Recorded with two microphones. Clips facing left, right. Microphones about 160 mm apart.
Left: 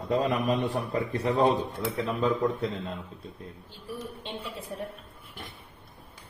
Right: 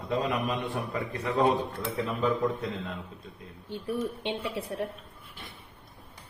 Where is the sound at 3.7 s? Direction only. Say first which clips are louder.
Right 9 dB; 65° right (ahead or behind).